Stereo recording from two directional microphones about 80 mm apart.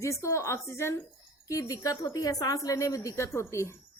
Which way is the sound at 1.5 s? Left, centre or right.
Left.